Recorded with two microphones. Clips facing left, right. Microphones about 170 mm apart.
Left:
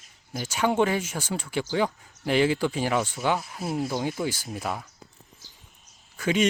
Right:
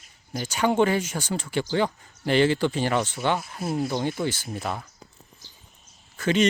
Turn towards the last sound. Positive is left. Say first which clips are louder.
# right 2 dB
turn(degrees=10)  # may be behind; listen again after turning